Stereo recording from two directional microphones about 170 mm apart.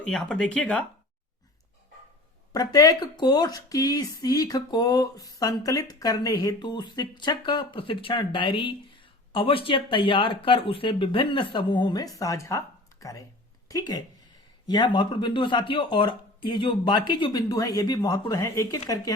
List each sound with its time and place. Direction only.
0.0 s speech: 5° left (ahead or behind)
2.5 s speech: 20° left (ahead or behind)